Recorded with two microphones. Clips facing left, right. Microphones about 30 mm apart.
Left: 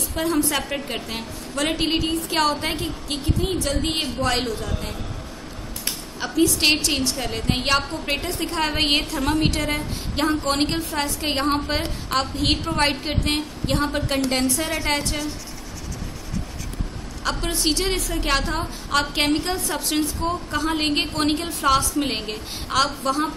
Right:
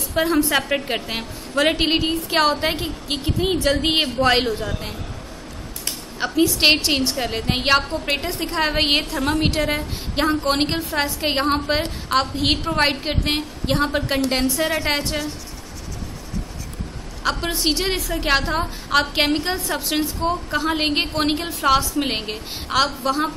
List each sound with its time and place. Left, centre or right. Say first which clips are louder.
0.1 s a woman's voice: right 4 dB; right
6.1 s a woman's voice: right 1 dB; right
17.2 s a woman's voice: right 2 dB; centre